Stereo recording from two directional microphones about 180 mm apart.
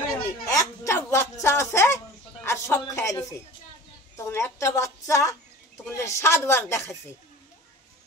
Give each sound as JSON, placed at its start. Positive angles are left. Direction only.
{"t": 0.5, "sound": "music", "side_deg": 15}
{"t": 2.4, "sound": "a sound", "side_deg": 15}
{"t": 4.2, "sound": "a woman's voice", "side_deg": 15}